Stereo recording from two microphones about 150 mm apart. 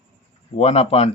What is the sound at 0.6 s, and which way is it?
Speech, 45° left (ahead or behind).